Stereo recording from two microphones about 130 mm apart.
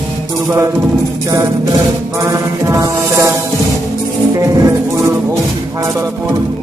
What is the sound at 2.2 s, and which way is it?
Music, 25° right (ahead or behind).